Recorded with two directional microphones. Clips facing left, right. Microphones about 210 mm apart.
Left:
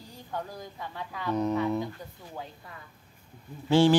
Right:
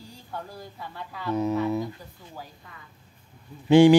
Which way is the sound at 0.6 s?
15° left (ahead or behind).